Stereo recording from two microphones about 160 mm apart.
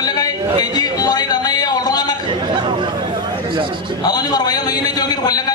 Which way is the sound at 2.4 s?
30° right (ahead or behind).